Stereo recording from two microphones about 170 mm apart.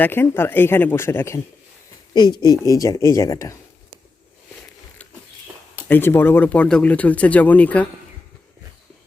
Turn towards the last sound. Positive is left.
turn(degrees=10)  # may be behind; listen again after turning